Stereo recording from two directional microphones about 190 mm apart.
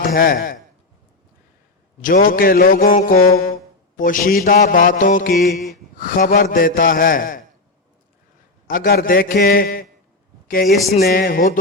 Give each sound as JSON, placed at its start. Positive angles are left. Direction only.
{"t": 0.1, "sound": "mantra", "side_deg": 45}
{"t": 2.0, "sound": "mantra", "side_deg": 45}
{"t": 8.6, "sound": "mantra", "side_deg": 50}